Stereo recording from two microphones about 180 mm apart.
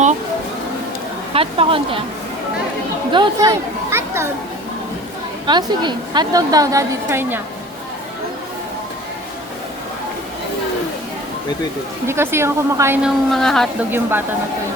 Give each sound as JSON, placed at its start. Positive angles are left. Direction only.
{"t": 1.3, "sound": "speech", "side_deg": -30}
{"t": 3.1, "sound": "speech", "side_deg": -25}
{"t": 5.5, "sound": "a woman's voice", "side_deg": -25}
{"t": 12.0, "sound": "speech", "side_deg": -15}
{"t": 13.0, "sound": "a woman's voice", "side_deg": 0}
{"t": 13.9, "sound": "speech", "side_deg": -10}